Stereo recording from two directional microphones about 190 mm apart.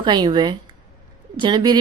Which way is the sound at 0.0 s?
25° right (ahead or behind).